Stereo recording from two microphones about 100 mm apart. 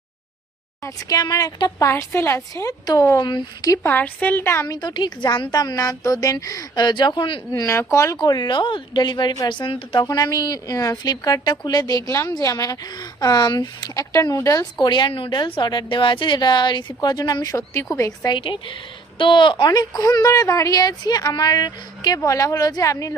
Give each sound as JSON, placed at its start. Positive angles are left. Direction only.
{"t": 0.9, "sound": "a woman's voice", "side_deg": 40}
{"t": 1.8, "sound": "a woman's voice", "side_deg": 25}
{"t": 3.8, "sound": "a woman's voice", "side_deg": 15}
{"t": 4.6, "sound": "speech", "side_deg": 45}
{"t": 7.5, "sound": "a woman's voice", "side_deg": 35}
{"t": 8.2, "sound": "speech", "side_deg": 45}
{"t": 10.0, "sound": "a woman's voice", "side_deg": 45}
{"t": 18.3, "sound": "a woman's voice", "side_deg": 55}